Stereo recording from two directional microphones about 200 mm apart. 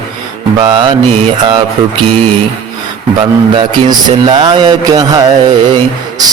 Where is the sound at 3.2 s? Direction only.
25° right (ahead or behind).